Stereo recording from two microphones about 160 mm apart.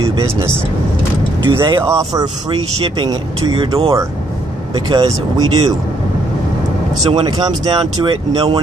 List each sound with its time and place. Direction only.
1.4 s speech: 30° right (ahead or behind)
1.8 s speech: 20° right (ahead or behind)
3.5 s speech: 35° right (ahead or behind)
7.0 s speech: 40° right (ahead or behind)
7.2 s speech: 25° right (ahead or behind)